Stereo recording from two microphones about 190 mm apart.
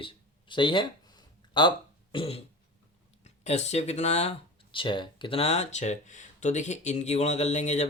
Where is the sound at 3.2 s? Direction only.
35° left (ahead or behind).